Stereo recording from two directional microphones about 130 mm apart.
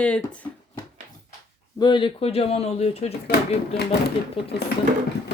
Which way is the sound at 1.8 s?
40° left (ahead or behind).